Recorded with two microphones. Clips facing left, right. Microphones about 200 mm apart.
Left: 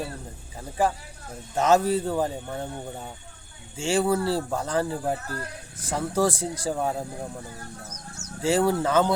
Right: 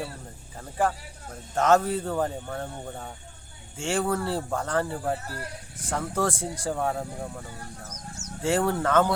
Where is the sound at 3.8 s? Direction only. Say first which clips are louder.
Left 3 dB; 5° left (ahead or behind).